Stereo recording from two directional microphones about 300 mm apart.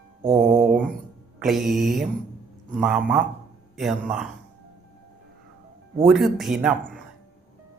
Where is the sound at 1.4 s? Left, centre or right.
Centre.